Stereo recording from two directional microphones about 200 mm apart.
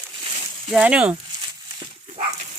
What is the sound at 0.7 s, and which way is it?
Speech, 5° right (ahead or behind).